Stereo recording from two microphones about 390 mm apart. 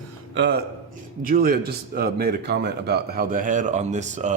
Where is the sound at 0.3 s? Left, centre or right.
Right.